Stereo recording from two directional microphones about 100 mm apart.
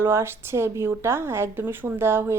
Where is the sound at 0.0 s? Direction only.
25° right (ahead or behind).